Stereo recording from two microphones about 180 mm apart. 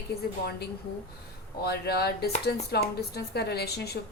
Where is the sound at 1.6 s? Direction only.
65° left (ahead or behind).